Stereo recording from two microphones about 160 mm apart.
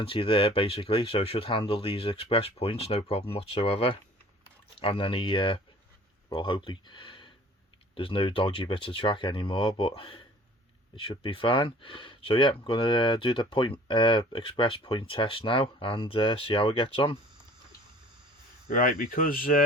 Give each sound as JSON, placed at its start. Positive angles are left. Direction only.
{"t": 0.0, "sound": "speech", "side_deg": 35}
{"t": 18.7, "sound": "speech", "side_deg": 60}